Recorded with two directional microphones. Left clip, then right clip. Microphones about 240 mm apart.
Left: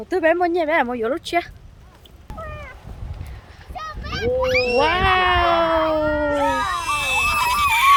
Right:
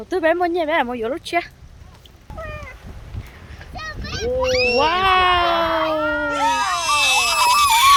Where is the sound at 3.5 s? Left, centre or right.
Centre.